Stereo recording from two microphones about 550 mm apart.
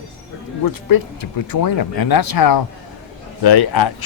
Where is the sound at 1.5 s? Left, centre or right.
Left.